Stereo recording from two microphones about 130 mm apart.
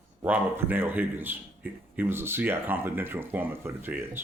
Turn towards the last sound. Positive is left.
turn(degrees=-15)  # may be behind; listen again after turning